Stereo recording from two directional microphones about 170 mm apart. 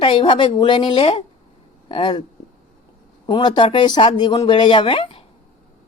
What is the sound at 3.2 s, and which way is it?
Speech, 25° left (ahead or behind).